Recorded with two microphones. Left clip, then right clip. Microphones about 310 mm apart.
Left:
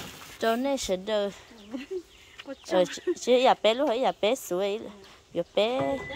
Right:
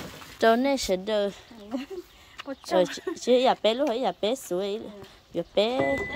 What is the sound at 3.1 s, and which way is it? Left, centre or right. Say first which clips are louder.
Speech: even; centre.